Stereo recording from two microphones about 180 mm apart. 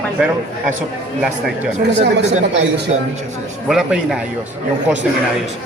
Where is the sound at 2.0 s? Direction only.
80° right.